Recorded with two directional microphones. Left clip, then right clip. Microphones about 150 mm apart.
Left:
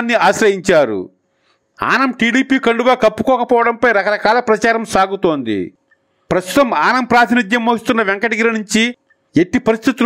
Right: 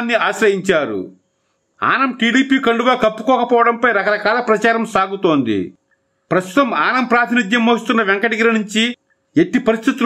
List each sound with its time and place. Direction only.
0.0 s a man's voice: 45° left (ahead or behind)